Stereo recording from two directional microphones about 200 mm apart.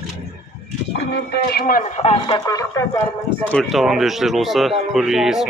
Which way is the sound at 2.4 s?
15° left (ahead or behind).